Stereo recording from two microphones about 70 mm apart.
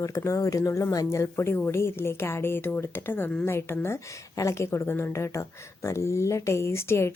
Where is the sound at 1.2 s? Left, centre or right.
Left.